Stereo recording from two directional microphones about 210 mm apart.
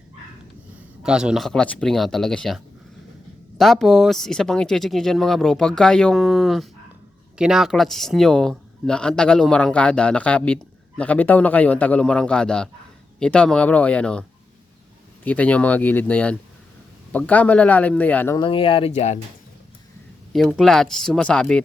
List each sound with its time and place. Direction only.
1.0 s speech: 5° right (ahead or behind)
3.6 s speech: centre (ahead or behind)
18.3 s speech: 25° left (ahead or behind)
20.3 s speech: centre (ahead or behind)